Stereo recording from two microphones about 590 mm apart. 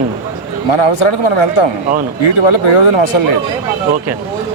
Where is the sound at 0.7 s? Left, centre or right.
Left.